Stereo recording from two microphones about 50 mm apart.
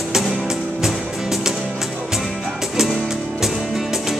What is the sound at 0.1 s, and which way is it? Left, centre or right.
Music, centre.